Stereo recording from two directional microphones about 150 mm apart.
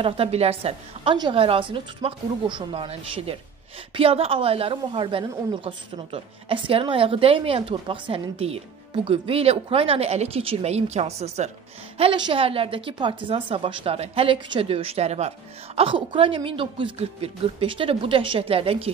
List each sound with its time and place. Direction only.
0.0 s a woman's voice: 40° right (ahead or behind)
12.0 s a woman's voice: 35° right (ahead or behind)